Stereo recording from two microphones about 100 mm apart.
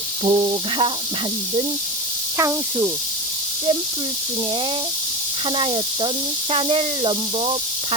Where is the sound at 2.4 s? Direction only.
25° right (ahead or behind).